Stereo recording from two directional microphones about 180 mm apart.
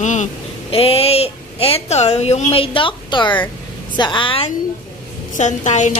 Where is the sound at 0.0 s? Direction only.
40° left (ahead or behind).